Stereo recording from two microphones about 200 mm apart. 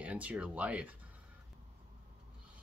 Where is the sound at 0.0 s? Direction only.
5° right (ahead or behind).